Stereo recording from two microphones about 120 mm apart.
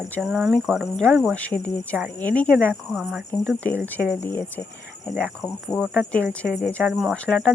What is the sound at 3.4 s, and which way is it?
A woman's voice, 15° left (ahead or behind).